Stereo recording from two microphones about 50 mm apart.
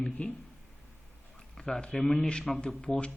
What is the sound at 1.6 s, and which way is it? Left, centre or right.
Speech, centre.